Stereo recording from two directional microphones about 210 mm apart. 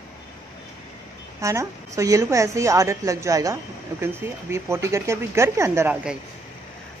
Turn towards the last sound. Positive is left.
turn(degrees=-5)  # may be behind; listen again after turning